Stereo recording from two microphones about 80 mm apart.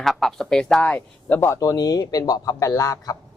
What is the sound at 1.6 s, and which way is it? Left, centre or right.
A man's voice, left.